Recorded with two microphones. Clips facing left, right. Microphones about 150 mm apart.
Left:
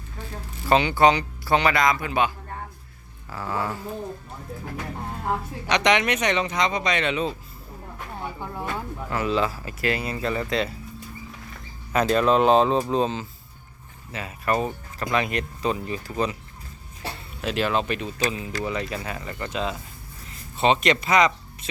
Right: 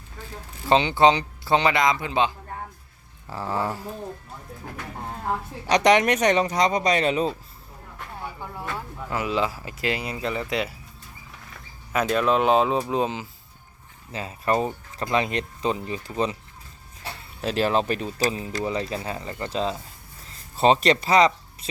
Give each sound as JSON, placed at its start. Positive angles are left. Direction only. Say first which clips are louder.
{"t": 0.7, "sound": "speech", "louder": "even", "side_deg": -20}
{"t": 5.6, "sound": "speech", "louder": "right 3 dB", "side_deg": -40}
{"t": 7.9, "sound": "a sound", "louder": "left 2 dB", "side_deg": 15}
{"t": 9.0, "sound": "speech", "louder": "left 1 dB", "side_deg": -15}
{"t": 11.9, "sound": "speech", "louder": "left 2 dB", "side_deg": -5}
{"t": 14.1, "sound": "speech", "louder": "right 1 dB", "side_deg": -30}
{"t": 17.4, "sound": "speech", "louder": "right 2 dB", "side_deg": -35}